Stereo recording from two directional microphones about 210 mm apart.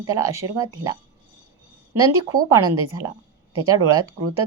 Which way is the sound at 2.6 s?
90° right.